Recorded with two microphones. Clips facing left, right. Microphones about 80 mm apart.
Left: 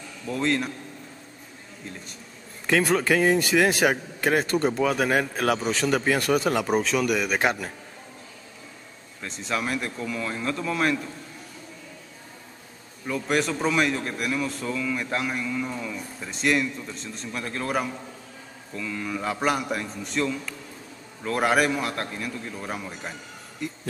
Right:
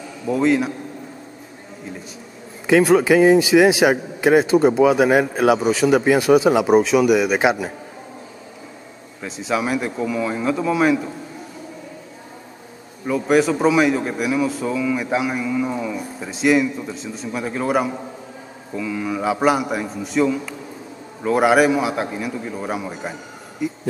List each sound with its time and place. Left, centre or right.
0.3 s a man's voice: centre
2.6 s a man's voice: centre
9.2 s a man's voice: centre
13.0 s a man's voice: centre
23.6 s a sound: centre